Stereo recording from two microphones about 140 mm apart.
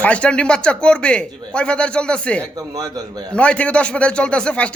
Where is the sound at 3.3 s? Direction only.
10° left (ahead or behind).